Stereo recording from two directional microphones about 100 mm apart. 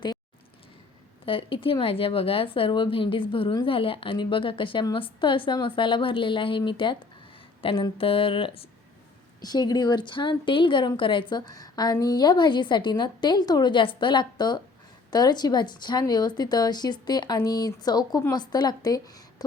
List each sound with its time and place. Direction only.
1.2 s a woman's voice: 60° left (ahead or behind)
7.6 s speech: 65° left (ahead or behind)
9.4 s a woman's voice: 40° left (ahead or behind)